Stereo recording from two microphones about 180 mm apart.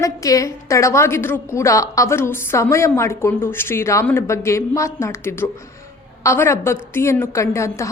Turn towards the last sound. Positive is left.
turn(degrees=15)  # may be behind; listen again after turning